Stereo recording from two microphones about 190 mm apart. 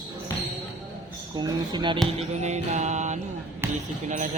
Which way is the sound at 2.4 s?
35° right (ahead or behind).